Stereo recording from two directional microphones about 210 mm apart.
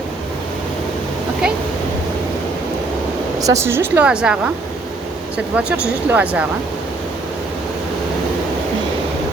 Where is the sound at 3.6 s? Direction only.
10° right (ahead or behind).